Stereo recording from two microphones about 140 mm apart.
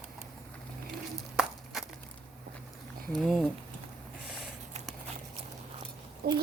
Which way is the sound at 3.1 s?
Centre (ahead or behind).